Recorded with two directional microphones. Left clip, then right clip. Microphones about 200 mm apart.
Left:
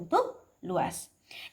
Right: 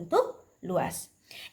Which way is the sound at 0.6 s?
35° right (ahead or behind).